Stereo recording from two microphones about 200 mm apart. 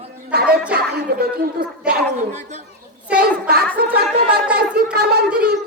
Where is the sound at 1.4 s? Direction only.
50° right (ahead or behind).